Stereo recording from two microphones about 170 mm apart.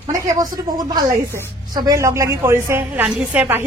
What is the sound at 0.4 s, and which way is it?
Speech, 25° right (ahead or behind).